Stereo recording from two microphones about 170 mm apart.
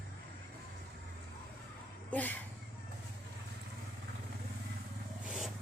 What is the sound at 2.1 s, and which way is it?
Speech, 10° left (ahead or behind).